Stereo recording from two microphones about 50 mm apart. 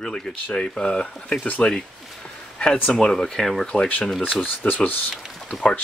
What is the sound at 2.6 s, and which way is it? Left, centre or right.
Speech, centre.